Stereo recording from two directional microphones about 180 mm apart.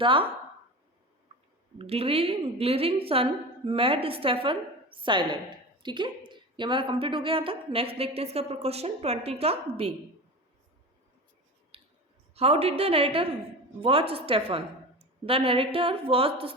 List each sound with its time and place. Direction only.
0.0 s a woman's voice: 30° right (ahead or behind)
1.8 s a woman's voice: 35° right (ahead or behind)
11.7 s clicking: 30° right (ahead or behind)
12.3 s a woman's voice: 35° right (ahead or behind)